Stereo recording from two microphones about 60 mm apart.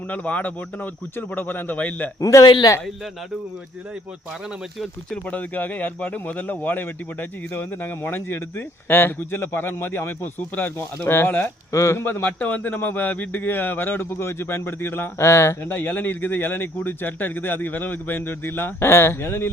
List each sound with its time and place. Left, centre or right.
0.1 s speech: left
2.2 s speech: left
5.1 s speech: left
11.7 s speech: left
12.2 s speech: left
15.2 s speech: left
15.7 s speech: left